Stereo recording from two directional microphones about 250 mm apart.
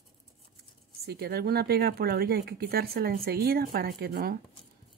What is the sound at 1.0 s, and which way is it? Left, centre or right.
Speech, right.